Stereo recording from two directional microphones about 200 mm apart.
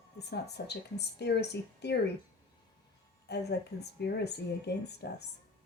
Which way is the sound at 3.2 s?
55° left (ahead or behind).